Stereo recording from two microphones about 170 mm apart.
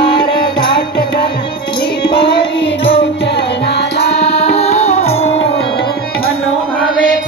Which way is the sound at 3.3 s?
80° left.